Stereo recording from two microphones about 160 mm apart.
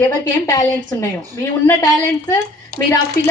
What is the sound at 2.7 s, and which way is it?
Speech, 70° right (ahead or behind).